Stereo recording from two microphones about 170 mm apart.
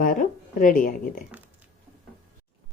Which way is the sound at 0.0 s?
55° left (ahead or behind).